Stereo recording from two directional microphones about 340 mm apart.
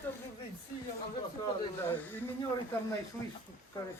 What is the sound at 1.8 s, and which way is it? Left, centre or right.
Speech, centre.